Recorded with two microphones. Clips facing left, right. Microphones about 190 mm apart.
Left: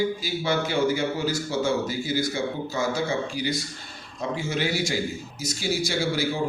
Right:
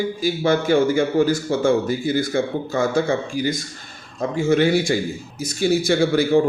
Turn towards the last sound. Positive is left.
turn(degrees=-55)  # may be behind; listen again after turning